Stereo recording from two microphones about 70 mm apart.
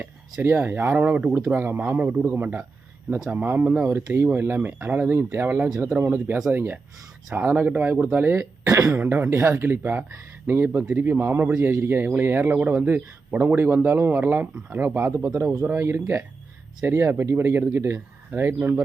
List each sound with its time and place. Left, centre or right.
0.4 s a man's voice: right
8.6 s speech: right
9.0 s a man's voice: right
16.8 s a man's voice: right